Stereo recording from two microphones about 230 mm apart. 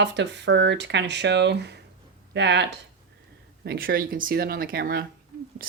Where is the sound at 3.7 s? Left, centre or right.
Right.